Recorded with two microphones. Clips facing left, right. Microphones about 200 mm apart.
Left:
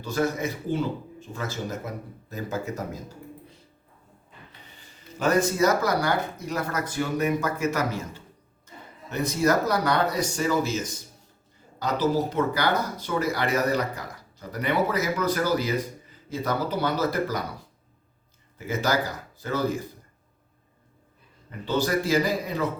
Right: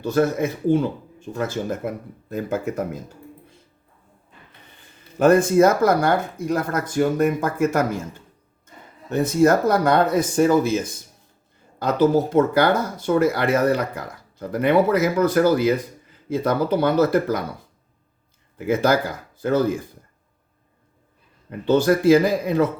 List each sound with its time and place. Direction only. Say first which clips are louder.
0.0 s speech: right 6 dB; 55° right (ahead or behind)
4.8 s speech: right 9 dB; 55° right (ahead or behind)
18.5 s speech: right 7 dB; 55° right (ahead or behind)
21.6 s speech: right 8 dB; 55° right (ahead or behind)